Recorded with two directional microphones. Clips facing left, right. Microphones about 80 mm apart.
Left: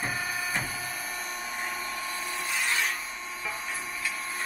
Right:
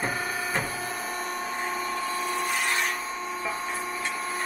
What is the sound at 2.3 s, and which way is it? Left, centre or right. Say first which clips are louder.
Wood: right 1 dB; right.